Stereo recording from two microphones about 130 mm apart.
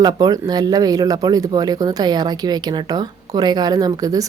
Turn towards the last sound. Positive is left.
turn(degrees=-25)  # may be behind; listen again after turning